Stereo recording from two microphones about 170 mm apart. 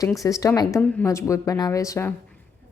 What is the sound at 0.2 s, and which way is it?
A woman's voice, 20° left (ahead or behind).